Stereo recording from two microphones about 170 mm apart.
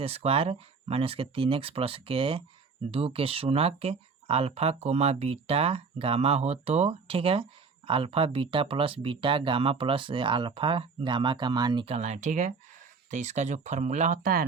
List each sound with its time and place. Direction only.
0.0 s speech: 35° right (ahead or behind)
11.9 s speech: 40° right (ahead or behind)